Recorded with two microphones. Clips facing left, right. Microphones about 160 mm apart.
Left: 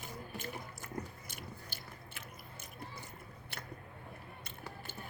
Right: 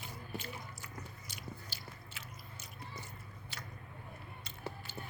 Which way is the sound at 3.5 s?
55° left (ahead or behind).